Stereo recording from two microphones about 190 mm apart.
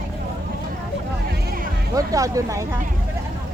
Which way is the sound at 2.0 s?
15° right (ahead or behind).